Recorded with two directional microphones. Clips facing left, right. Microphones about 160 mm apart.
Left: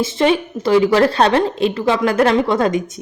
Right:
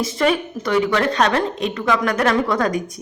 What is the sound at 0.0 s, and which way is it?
Speech, 25° left (ahead or behind).